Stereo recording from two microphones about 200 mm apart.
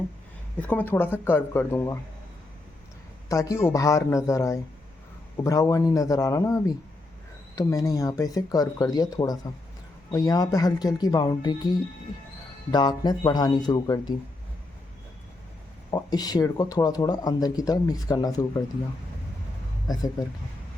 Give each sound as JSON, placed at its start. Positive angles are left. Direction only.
{"t": 0.7, "sound": "speech", "side_deg": 10}
{"t": 3.2, "sound": "speech", "side_deg": 15}
{"t": 15.9, "sound": "speech", "side_deg": 20}
{"t": 19.9, "sound": "speech", "side_deg": 20}